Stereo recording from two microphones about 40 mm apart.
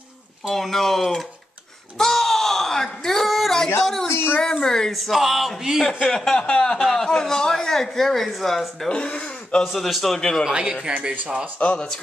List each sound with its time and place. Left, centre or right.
0.5 s speech: centre
2.0 s a sound: centre
3.8 s music: centre
4.1 s a sound: left
4.6 s speech: centre
4.9 s music: centre
6.0 s speech: centre
6.3 s speech: left
6.8 s speech: centre
8.8 s speech: left
9.7 s music: centre
10.1 s speech: centre
10.4 s speech: centre
11.6 s speech: left